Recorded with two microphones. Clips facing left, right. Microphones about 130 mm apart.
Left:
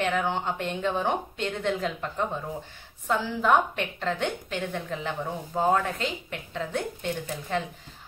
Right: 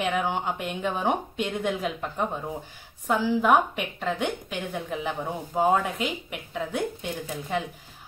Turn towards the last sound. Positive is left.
turn(degrees=-10)  # may be behind; listen again after turning